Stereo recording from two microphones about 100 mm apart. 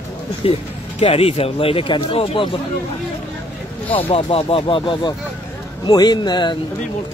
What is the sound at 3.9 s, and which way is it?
Speech, 70° left (ahead or behind).